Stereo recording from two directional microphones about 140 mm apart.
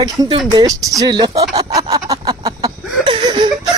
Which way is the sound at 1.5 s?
25° right (ahead or behind).